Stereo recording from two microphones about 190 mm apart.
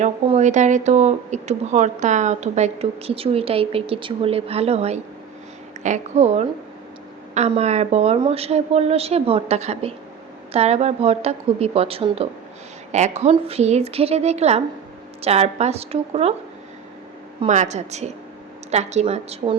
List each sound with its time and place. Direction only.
0.0 s speech: 35° right (ahead or behind)
17.4 s speech: 40° right (ahead or behind)